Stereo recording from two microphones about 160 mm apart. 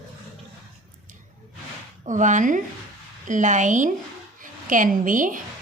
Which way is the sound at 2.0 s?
50° right (ahead or behind).